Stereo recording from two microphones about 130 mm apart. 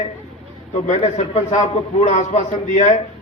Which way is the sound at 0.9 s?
65° left (ahead or behind).